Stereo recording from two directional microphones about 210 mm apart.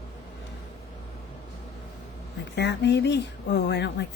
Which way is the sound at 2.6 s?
55° left (ahead or behind).